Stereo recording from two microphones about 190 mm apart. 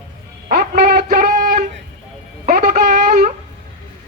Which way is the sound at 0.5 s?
50° right (ahead or behind).